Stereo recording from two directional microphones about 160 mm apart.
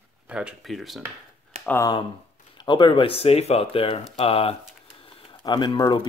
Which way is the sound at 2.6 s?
30° left (ahead or behind).